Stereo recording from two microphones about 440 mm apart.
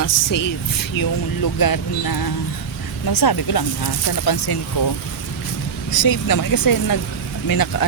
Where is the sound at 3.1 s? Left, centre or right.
Left.